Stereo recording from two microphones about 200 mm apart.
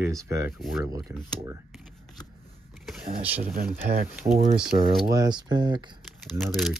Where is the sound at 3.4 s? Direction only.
45° right (ahead or behind).